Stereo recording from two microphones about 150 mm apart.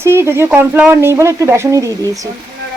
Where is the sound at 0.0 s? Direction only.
15° right (ahead or behind).